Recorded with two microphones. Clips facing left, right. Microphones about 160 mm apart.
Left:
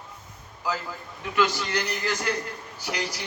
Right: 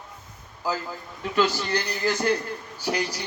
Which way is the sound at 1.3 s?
35° right (ahead or behind).